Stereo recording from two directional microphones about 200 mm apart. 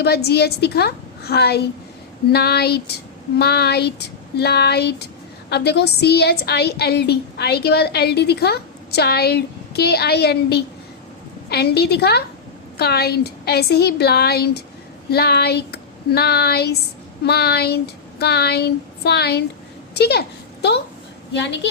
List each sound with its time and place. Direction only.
0.0 s a woman's voice: 55° left (ahead or behind)